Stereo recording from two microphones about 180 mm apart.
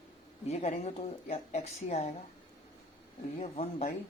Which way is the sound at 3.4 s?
35° left (ahead or behind).